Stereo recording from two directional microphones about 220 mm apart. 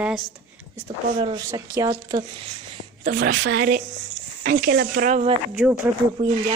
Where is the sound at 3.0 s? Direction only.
40° right (ahead or behind).